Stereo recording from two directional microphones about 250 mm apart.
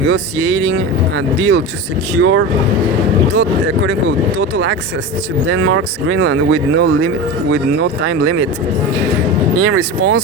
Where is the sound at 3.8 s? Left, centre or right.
Right.